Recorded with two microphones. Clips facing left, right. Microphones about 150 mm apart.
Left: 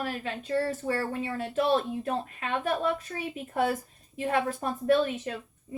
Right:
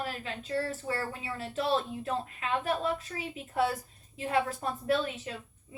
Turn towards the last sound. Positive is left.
turn(degrees=50)  # may be behind; listen again after turning